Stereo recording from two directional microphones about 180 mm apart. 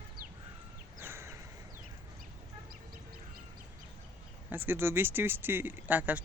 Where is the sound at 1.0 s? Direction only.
15° right (ahead or behind).